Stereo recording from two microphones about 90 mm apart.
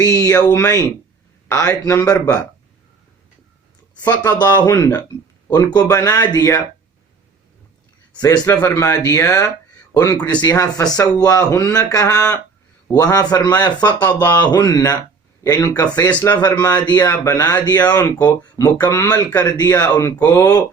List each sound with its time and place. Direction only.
0.0 s speech: 40° left (ahead or behind)
4.2 s speech: 50° left (ahead or behind)
8.1 s a man's voice: 50° left (ahead or behind)
8.4 s speech: 40° left (ahead or behind)
20.2 s speech: 45° left (ahead or behind)